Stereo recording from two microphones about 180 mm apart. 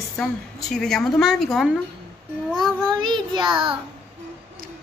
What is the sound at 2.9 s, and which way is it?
Speech, 25° right (ahead or behind).